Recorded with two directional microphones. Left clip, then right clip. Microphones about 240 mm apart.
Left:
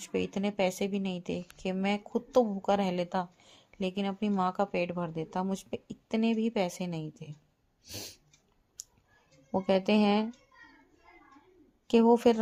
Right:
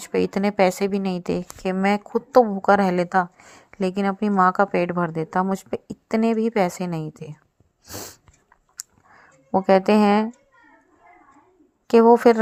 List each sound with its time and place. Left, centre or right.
0.1 s a woman's voice: right
8.8 s a sound: right
9.5 s a woman's voice: right
11.9 s a woman's voice: right